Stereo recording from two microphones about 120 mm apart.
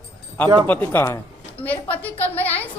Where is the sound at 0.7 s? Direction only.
15° left (ahead or behind).